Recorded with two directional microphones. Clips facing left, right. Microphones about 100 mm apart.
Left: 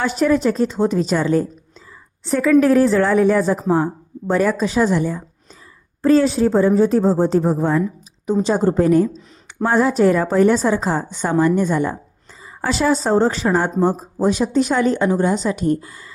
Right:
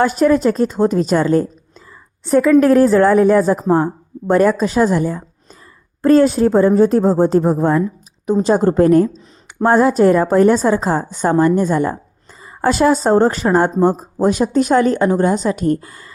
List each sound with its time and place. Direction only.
0.0 s speech: 45° right (ahead or behind)
2.6 s speech: 45° right (ahead or behind)